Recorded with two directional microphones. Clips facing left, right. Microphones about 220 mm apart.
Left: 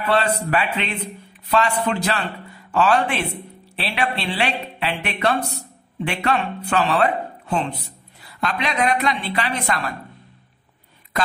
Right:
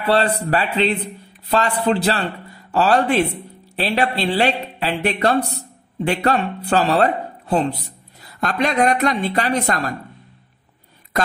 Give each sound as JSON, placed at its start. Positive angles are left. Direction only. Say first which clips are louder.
{"t": 0.0, "sound": "a man's voice", "louder": "right 2 dB", "side_deg": -35}